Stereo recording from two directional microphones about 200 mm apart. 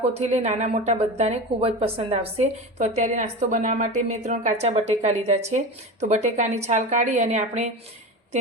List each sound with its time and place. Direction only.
0.2 s a woman's voice: 35° right (ahead or behind)